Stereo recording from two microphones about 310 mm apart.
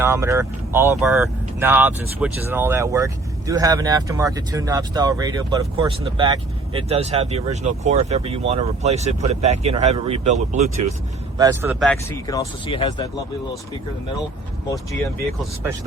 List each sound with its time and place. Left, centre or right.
0.0 s speech: centre
11.3 s speech: centre
12.3 s speech: centre